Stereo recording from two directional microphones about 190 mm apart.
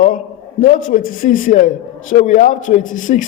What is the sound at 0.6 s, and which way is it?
Speech, 45° left (ahead or behind).